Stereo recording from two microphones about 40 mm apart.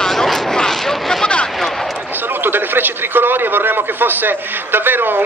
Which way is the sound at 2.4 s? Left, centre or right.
Right.